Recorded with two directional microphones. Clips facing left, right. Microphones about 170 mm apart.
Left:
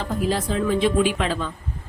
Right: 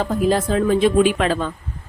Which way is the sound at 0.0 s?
50° right (ahead or behind).